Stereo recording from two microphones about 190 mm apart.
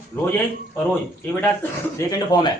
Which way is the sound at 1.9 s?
20° left (ahead or behind).